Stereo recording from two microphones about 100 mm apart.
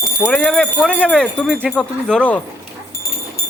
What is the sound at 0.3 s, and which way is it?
Speech, 10° left (ahead or behind).